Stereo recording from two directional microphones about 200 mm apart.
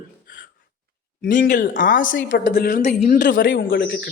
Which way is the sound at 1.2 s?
45° left (ahead or behind).